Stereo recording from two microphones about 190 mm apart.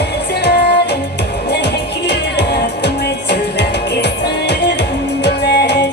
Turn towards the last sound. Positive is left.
turn(degrees=60)  # may be behind; listen again after turning